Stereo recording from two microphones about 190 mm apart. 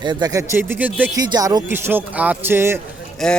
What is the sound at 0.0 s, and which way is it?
Speech, 20° right (ahead or behind).